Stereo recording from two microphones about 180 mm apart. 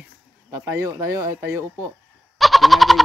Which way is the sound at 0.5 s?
15° right (ahead or behind).